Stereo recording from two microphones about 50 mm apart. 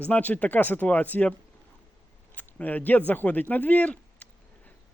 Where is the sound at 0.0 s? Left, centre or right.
Left.